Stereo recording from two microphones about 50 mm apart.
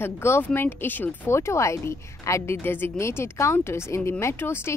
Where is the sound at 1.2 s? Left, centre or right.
Left.